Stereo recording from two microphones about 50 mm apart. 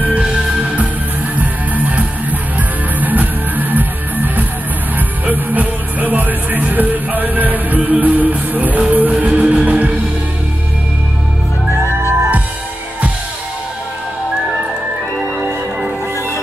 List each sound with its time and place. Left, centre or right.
0.0 s music: right
0.3 s music: centre
1.3 s music: right
11.9 s music: right